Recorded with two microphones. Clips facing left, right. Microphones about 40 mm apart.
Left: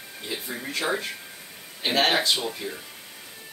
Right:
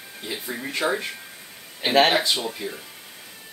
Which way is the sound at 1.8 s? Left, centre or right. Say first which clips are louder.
Right 5 dB; centre.